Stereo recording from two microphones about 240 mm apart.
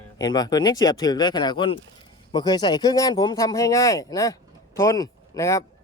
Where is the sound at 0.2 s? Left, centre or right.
Centre.